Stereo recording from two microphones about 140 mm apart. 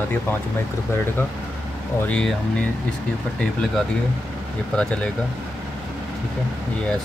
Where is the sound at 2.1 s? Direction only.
10° left (ahead or behind).